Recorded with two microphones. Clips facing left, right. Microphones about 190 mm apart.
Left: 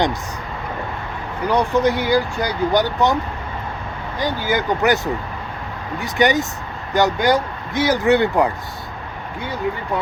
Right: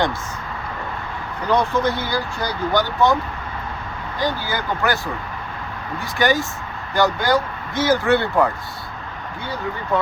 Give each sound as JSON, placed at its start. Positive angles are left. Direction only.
{"t": 1.5, "sound": "speech", "side_deg": 15}
{"t": 4.4, "sound": "speech", "side_deg": 20}
{"t": 6.0, "sound": "speech", "side_deg": 20}